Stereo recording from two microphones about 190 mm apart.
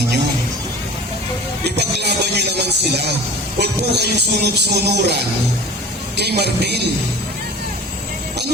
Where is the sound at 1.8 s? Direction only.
60° right (ahead or behind).